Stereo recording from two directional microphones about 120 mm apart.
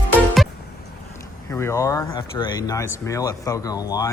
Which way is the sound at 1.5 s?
25° left (ahead or behind).